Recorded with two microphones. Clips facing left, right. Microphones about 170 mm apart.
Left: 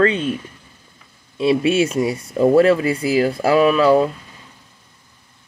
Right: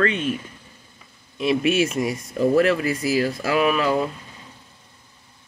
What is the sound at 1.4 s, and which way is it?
Speech, 30° left (ahead or behind).